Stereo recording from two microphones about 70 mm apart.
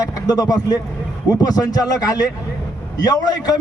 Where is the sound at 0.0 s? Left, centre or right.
Left.